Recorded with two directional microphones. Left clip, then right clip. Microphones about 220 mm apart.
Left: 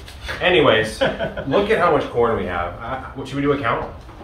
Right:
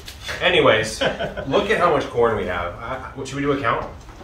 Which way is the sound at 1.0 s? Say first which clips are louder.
Left 2 dB; 5° left (ahead or behind).